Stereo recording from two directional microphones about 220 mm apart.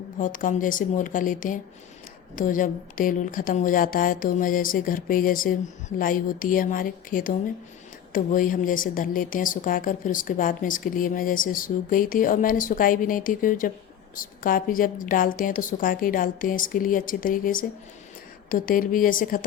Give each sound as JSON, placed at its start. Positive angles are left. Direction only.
{"t": 0.2, "sound": "a woman's voice", "side_deg": 35}